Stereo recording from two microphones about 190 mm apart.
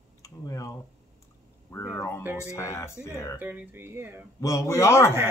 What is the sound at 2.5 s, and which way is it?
Speech, 15° left (ahead or behind).